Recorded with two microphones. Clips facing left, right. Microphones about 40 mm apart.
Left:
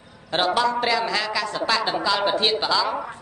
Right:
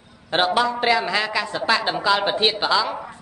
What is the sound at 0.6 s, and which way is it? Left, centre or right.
A woman's voice, centre.